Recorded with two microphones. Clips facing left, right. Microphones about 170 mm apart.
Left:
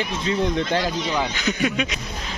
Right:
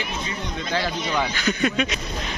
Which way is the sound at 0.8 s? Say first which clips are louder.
Left 1 dB; 15° left (ahead or behind).